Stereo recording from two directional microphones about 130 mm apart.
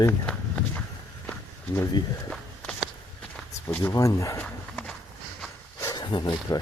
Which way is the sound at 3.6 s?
20° left (ahead or behind).